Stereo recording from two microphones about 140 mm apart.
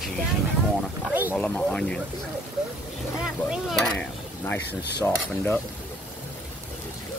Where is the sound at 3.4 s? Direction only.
5° right (ahead or behind); by 5.6 s 15° left (ahead or behind).